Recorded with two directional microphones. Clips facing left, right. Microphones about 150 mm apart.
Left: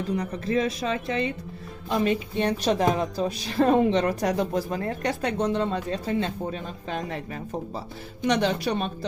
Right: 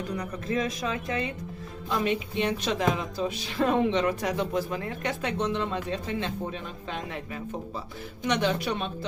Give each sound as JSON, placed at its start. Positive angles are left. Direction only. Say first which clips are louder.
{"t": 0.4, "sound": "a woman's voice", "louder": "left 3 dB", "side_deg": 30}
{"t": 8.3, "sound": "a woman's voice", "louder": "left 3 dB", "side_deg": 35}